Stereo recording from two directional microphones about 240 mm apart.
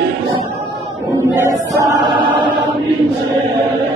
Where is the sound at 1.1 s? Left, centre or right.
Centre.